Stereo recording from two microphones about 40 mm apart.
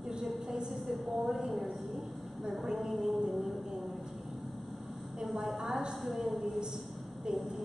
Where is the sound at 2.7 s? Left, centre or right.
Centre.